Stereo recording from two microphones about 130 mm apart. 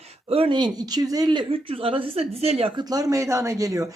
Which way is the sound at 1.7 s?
45° right (ahead or behind).